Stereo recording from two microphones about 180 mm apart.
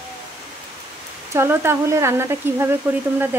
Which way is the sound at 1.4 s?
15° right (ahead or behind).